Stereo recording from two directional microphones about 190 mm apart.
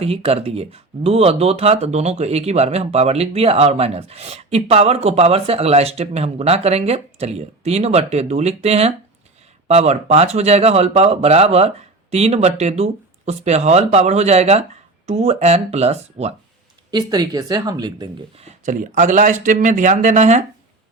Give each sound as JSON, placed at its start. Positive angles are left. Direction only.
{"t": 0.0, "sound": "speech", "side_deg": -30}
{"t": 16.9, "sound": "speech", "side_deg": -20}
{"t": 18.4, "sound": "speech", "side_deg": -40}